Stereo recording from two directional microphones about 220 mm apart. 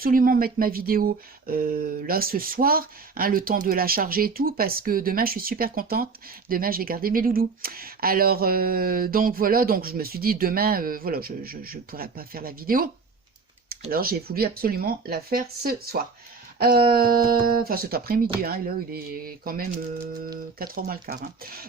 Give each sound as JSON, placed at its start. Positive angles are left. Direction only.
{"t": 0.0, "sound": "speech", "side_deg": -40}